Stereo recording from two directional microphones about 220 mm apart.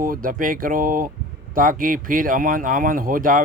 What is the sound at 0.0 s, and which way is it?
Speech, 40° right (ahead or behind).